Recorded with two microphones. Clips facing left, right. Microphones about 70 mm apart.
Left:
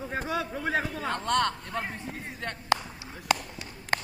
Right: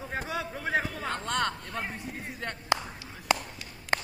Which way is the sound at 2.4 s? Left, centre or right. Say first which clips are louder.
Left 2 dB; centre.